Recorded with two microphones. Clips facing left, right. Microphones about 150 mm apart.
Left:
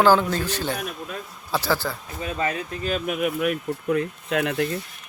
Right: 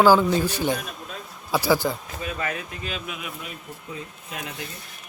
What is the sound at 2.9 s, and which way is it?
Speech, 50° left (ahead or behind).